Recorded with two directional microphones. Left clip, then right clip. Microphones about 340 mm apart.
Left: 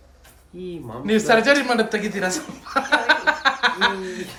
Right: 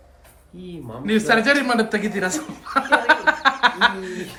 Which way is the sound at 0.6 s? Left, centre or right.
Centre.